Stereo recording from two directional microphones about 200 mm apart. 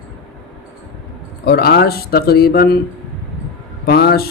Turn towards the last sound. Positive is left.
turn(degrees=50)  # may be behind; listen again after turning